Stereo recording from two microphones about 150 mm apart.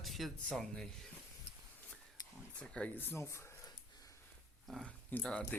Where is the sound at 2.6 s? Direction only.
10° left (ahead or behind).